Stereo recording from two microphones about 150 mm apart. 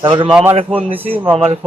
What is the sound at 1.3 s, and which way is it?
Speech, 40° right (ahead or behind).